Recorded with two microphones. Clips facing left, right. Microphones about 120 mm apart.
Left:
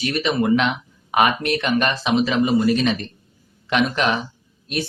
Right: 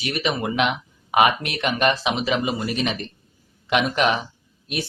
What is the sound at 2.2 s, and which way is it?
Speech, 15° right (ahead or behind).